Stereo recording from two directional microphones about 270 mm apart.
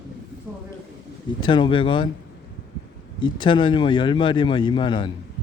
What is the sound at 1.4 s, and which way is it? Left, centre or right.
Speech, centre.